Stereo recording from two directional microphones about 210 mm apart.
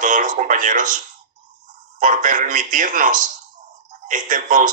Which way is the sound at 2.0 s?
40° right (ahead or behind).